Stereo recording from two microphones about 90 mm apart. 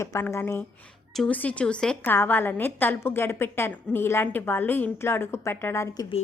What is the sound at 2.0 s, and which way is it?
A woman's voice, 20° left (ahead or behind).